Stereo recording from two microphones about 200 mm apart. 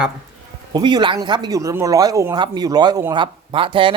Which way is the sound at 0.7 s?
20° right (ahead or behind).